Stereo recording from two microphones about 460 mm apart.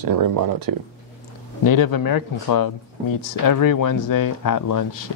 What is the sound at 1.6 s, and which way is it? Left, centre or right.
Speech, left.